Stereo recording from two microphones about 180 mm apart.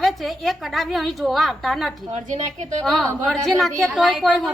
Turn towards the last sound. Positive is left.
turn(degrees=0)  # may be behind; listen again after turning